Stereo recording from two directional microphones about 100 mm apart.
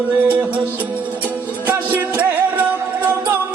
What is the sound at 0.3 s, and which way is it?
Music, 15° right (ahead or behind).